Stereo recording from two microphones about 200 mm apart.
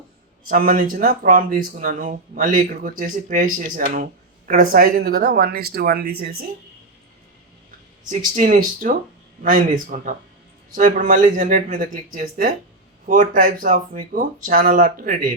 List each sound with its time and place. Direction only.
0.4 s speech: 45° right (ahead or behind)
8.1 s speech: 40° right (ahead or behind)